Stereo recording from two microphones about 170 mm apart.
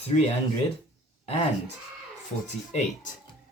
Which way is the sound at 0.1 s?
35° left (ahead or behind).